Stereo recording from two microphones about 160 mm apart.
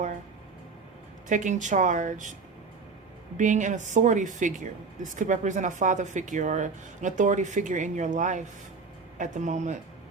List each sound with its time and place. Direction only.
1.3 s speech: 50° right (ahead or behind)
3.3 s speech: 50° right (ahead or behind)